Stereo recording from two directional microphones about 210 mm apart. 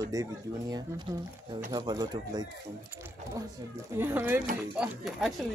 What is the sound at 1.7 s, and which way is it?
Speech, 20° right (ahead or behind).